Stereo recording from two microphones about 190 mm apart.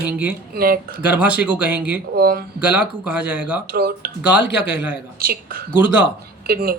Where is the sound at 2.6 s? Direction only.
10° right (ahead or behind).